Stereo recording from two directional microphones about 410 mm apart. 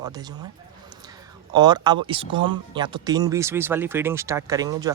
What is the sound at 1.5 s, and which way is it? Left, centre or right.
Speech, centre.